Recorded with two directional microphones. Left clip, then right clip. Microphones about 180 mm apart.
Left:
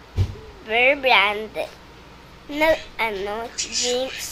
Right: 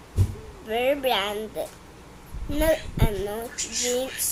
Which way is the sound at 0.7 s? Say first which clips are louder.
Left 7 dB; 20° right (ahead or behind).